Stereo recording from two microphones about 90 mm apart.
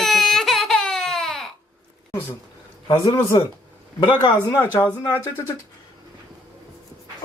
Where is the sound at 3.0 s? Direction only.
35° left (ahead or behind).